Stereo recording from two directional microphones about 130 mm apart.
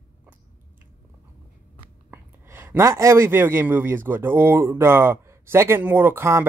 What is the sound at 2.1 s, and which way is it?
A man's voice, 15° right (ahead or behind).